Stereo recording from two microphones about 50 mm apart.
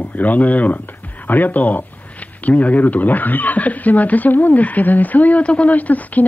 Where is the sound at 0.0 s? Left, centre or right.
Left.